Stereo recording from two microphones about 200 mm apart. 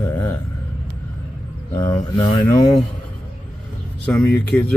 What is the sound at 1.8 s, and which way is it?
Speech, 15° left (ahead or behind).